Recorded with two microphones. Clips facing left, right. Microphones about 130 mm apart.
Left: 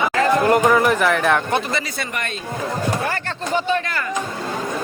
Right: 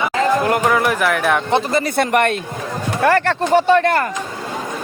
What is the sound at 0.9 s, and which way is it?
Speech, 5° right (ahead or behind).